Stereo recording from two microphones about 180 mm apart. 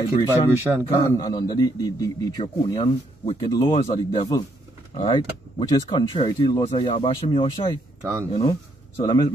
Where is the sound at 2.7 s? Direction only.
35° left (ahead or behind).